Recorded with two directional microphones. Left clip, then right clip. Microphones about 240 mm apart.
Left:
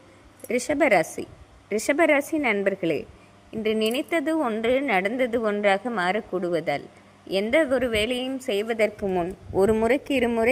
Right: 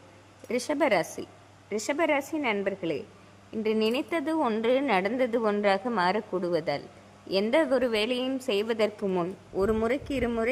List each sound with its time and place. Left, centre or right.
0.4 s a woman's voice: centre
9.6 s a woman's voice: centre